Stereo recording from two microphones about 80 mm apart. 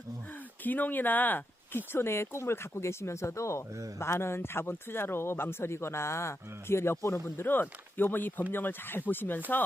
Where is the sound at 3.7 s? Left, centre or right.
Right.